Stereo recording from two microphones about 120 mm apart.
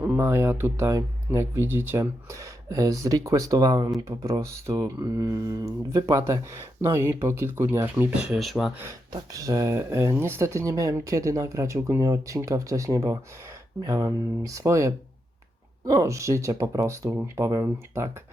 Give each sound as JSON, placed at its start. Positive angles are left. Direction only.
{"t": 0.0, "sound": "speech", "side_deg": -20}
{"t": 8.2, "sound": "speech", "side_deg": -5}
{"t": 8.8, "sound": "speech", "side_deg": -25}